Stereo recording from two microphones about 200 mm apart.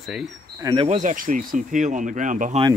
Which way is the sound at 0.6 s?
15° right (ahead or behind).